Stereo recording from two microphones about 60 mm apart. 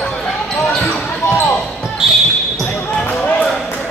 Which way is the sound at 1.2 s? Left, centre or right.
Left.